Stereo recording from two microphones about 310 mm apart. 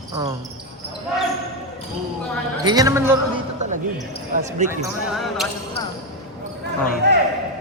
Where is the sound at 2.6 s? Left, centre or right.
Centre.